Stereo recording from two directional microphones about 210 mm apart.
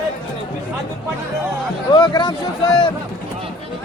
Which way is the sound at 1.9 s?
20° left (ahead or behind).